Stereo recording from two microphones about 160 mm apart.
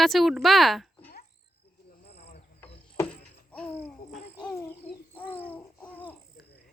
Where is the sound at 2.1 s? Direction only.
40° left (ahead or behind).